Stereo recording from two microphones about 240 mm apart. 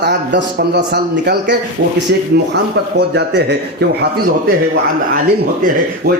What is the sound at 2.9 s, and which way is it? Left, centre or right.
Speech, right.